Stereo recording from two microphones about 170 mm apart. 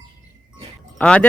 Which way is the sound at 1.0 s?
5° left (ahead or behind).